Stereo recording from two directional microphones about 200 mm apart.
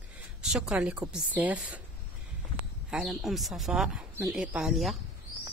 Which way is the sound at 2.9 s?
5° right (ahead or behind).